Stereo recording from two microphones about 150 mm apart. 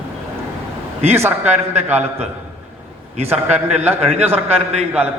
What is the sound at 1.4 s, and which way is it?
Speech, 45° right (ahead or behind).